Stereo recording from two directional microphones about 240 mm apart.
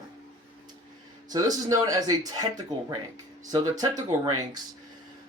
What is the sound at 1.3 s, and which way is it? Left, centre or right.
Speech, centre.